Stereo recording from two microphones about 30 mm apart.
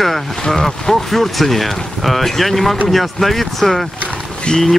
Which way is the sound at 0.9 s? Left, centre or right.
Centre.